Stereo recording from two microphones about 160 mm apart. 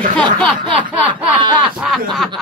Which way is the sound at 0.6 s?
30° right (ahead or behind).